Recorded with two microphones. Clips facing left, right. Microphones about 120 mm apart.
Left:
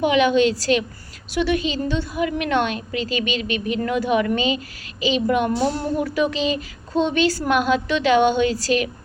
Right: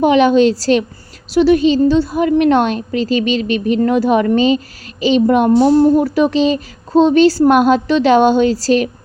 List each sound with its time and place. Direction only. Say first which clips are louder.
0.0 s a woman's voice: right 7 dB; 40° right (ahead or behind)